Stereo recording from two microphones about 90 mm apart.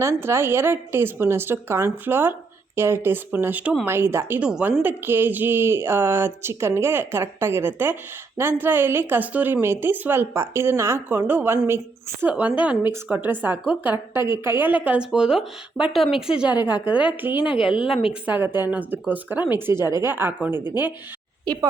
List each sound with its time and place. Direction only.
0.0 s a woman's voice: 30° right (ahead or behind)
4.4 s speech: 10° right (ahead or behind)
4.8 s a woman's voice: 20° right (ahead or behind); by 16.3 s centre (ahead or behind)
16.4 s a woman's voice: 20° right (ahead or behind)
17.4 s speech: 10° right (ahead or behind)
18.1 s a woman's voice: 15° right (ahead or behind)
21.4 s a woman's voice: 45° right (ahead or behind)